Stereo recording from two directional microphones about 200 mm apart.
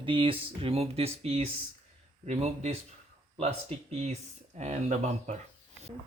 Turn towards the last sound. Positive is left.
turn(degrees=-35)  # may be behind; listen again after turning